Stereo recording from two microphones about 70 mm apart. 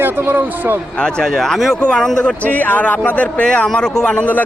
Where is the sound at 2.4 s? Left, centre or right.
Left.